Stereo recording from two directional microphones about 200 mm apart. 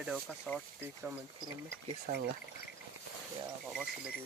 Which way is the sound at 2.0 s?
55° right (ahead or behind).